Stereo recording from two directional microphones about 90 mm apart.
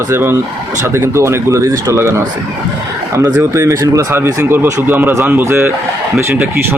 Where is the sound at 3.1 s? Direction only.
40° right (ahead or behind).